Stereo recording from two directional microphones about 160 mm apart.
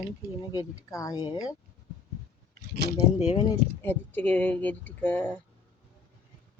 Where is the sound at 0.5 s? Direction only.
20° left (ahead or behind).